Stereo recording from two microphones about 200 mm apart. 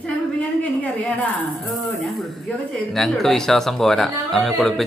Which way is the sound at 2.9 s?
Centre (ahead or behind).